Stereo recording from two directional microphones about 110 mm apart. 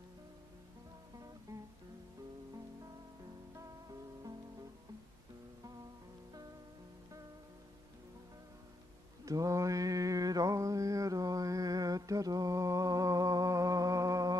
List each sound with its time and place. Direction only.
1.5 s guitar: 30° right (ahead or behind)
9.2 s mantra: 30° right (ahead or behind)